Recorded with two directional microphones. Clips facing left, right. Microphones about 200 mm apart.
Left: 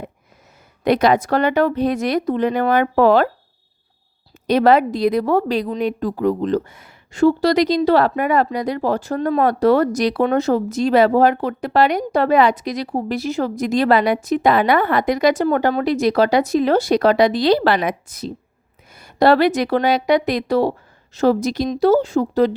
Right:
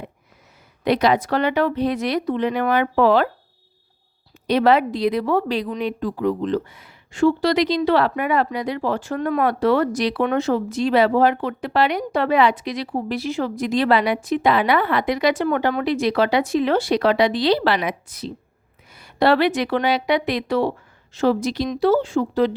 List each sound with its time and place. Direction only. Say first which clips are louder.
0.9 s speech: left 3 dB; 45° left (ahead or behind)
4.4 s a woman's voice: left 3 dB; 45° left (ahead or behind)